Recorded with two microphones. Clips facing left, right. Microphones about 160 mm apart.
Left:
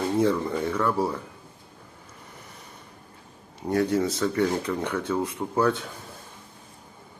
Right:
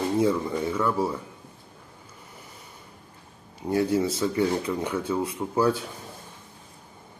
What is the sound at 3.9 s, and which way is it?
Speech, 25° right (ahead or behind).